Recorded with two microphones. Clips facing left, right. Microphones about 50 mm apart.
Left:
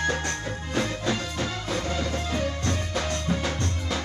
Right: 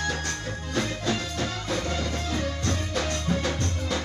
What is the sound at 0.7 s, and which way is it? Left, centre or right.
Music, centre.